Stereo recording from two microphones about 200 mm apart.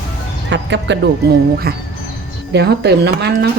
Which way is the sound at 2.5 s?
55° right (ahead or behind).